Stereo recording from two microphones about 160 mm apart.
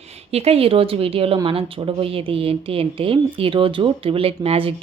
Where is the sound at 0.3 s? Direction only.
40° right (ahead or behind).